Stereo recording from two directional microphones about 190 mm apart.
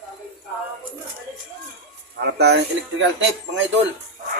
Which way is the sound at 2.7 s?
70° right (ahead or behind).